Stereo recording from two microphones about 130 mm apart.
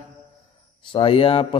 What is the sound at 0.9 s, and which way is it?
Speech, 45° left (ahead or behind).